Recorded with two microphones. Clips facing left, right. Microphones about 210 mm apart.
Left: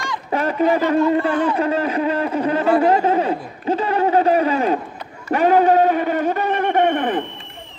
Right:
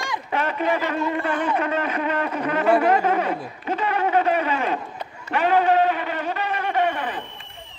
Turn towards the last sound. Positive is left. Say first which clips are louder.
# left 6 dB
turn(degrees=50)  # may be behind; listen again after turning